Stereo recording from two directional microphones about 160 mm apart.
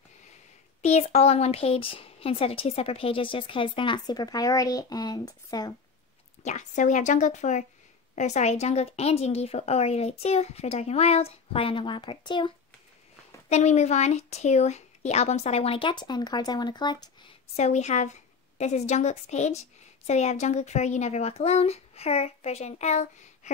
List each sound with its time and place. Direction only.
0.8 s speech: 40° left (ahead or behind); by 5.8 s 25° left (ahead or behind)
6.4 s a woman's voice: 50° left (ahead or behind); by 12.5 s 30° left (ahead or behind)
13.5 s speech: 45° left (ahead or behind); by 17.0 s 25° left (ahead or behind)
17.6 s a woman's voice: 45° left (ahead or behind)